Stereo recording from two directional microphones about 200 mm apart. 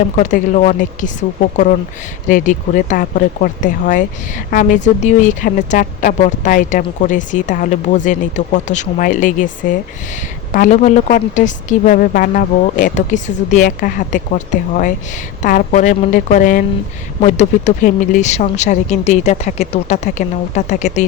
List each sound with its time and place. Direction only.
0.2 s speech: 40° left (ahead or behind)
2.2 s speech: 40° left (ahead or behind)